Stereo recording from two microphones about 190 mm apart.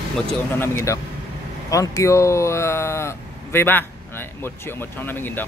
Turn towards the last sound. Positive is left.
turn(degrees=10)  # may be behind; listen again after turning